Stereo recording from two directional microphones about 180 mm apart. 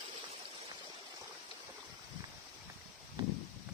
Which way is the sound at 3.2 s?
30° right (ahead or behind).